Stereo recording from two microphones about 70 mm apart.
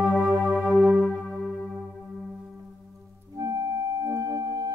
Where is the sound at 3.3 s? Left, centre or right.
Right.